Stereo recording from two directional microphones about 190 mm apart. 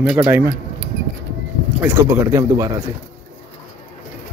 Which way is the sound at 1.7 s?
15° right (ahead or behind).